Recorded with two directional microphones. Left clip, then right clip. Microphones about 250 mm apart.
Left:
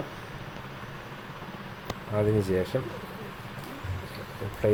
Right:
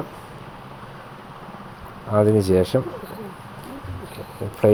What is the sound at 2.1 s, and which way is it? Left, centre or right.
Speech, right.